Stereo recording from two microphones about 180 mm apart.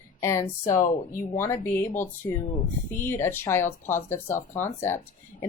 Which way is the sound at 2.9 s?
15° left (ahead or behind).